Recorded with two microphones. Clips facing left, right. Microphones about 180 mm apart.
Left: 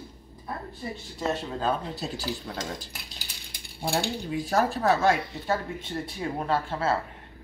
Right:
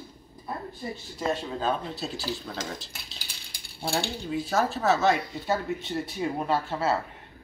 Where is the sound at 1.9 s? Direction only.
15° left (ahead or behind).